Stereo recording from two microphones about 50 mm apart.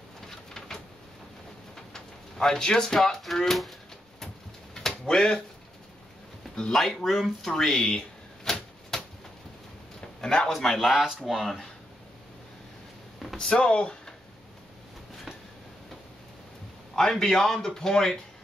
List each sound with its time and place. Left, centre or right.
0.3 s a sound: centre
1.8 s speech: centre
4.8 s a sound: centre
6.7 s a man's voice: centre
8.5 s typewriter: centre
9.9 s a sound: centre
10.6 s speech: centre
13.5 s speech: centre
16.9 s a man's voice: centre